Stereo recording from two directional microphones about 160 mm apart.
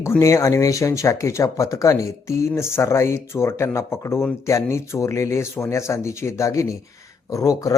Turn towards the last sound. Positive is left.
turn(degrees=20)  # may be behind; listen again after turning